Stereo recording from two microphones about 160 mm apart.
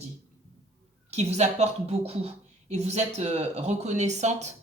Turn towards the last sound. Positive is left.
turn(degrees=-45)  # may be behind; listen again after turning